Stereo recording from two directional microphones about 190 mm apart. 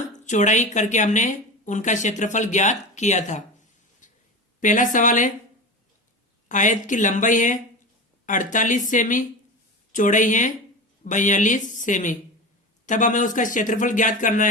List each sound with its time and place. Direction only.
0.3 s a woman's voice: 40° left (ahead or behind)
4.0 s a sound: 40° left (ahead or behind)
4.6 s a man's voice: 40° left (ahead or behind)
6.5 s a woman's voice: 40° left (ahead or behind)